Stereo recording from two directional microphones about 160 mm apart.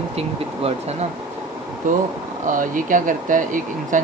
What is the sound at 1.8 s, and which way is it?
Speech, 55° right (ahead or behind).